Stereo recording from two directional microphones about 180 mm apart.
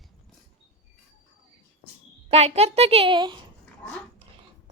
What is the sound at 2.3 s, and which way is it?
A woman's voice, 35° right (ahead or behind).